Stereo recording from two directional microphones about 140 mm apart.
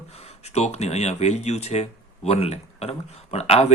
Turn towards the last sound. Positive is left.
turn(degrees=50)  # may be behind; listen again after turning